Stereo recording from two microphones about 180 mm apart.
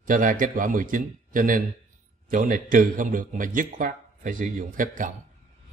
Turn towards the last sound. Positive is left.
turn(degrees=-45)  # may be behind; listen again after turning